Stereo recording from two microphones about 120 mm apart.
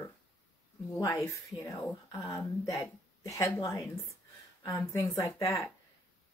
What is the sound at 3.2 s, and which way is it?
A woman's voice, 25° left (ahead or behind).